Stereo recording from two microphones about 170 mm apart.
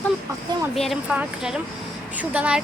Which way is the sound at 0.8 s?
Centre (ahead or behind).